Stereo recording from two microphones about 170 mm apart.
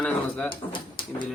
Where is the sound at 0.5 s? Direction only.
30° left (ahead or behind).